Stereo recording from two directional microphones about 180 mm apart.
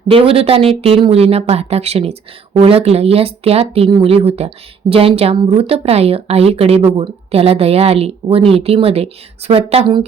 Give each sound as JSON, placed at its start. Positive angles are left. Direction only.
{"t": 0.1, "sound": "speech", "side_deg": -30}